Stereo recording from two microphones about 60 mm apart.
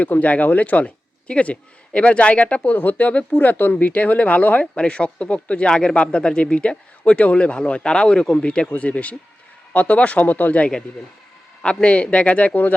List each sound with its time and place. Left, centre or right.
0.0 s speech: left